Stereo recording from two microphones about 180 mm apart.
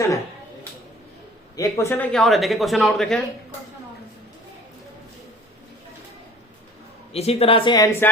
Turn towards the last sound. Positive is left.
turn(degrees=25)  # may be behind; listen again after turning